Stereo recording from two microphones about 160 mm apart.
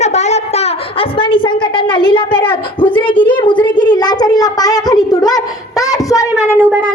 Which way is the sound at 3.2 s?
30° left (ahead or behind).